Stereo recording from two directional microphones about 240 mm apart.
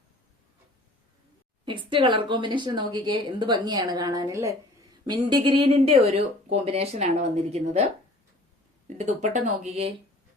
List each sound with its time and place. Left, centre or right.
1.6 s speech: centre
9.0 s speech: right